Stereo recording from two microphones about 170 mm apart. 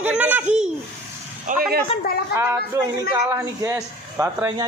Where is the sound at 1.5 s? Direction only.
50° right (ahead or behind).